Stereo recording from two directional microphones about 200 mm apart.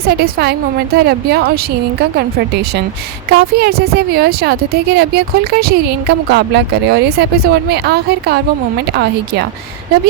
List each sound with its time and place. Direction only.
0.0 s a woman's voice: 50° right (ahead or behind)